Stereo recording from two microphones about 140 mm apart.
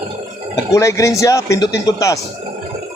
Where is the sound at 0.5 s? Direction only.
20° left (ahead or behind).